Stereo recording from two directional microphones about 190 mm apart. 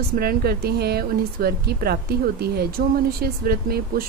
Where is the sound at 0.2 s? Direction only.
55° right (ahead or behind).